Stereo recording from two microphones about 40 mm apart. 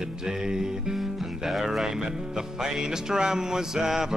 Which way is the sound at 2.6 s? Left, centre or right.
Centre.